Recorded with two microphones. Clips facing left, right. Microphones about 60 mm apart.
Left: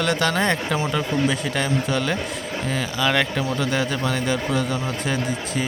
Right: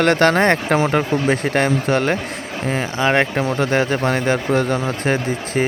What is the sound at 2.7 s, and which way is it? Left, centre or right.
A man's voice, right.